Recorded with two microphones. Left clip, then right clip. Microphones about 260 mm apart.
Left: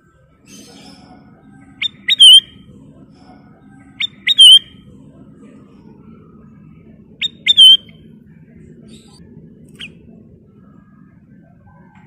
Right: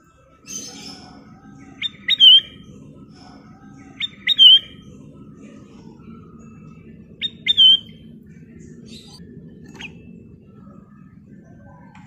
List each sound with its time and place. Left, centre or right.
1.8 s bird: left
4.0 s bird: left
7.2 s bird: left